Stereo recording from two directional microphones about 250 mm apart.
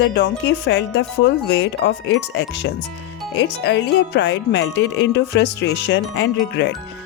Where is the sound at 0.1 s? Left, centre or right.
Left.